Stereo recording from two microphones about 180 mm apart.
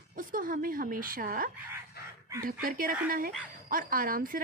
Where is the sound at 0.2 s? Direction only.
50° right (ahead or behind).